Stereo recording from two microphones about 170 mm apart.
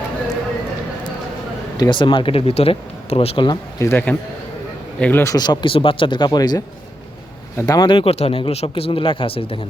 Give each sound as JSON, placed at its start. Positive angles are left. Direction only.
{"t": 1.8, "sound": "speech", "side_deg": 25}